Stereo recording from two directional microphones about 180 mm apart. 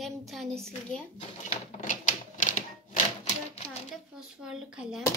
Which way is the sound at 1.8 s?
45° left (ahead or behind).